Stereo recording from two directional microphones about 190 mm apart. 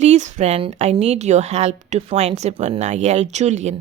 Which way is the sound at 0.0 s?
35° right (ahead or behind).